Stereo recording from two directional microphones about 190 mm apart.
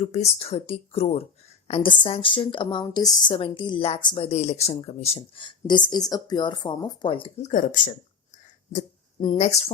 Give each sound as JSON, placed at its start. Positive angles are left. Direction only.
{"t": 0.0, "sound": "a woman's voice", "side_deg": 35}
{"t": 9.2, "sound": "speech", "side_deg": 30}